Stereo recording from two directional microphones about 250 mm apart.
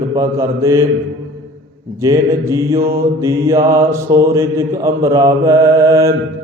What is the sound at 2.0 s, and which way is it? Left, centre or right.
A man's voice, centre.